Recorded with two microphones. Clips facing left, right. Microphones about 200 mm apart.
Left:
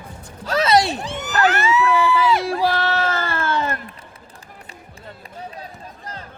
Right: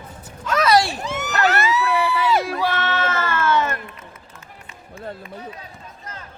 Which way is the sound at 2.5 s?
35° left (ahead or behind).